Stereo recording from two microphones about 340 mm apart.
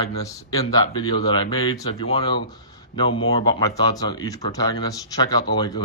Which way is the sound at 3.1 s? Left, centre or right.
Left.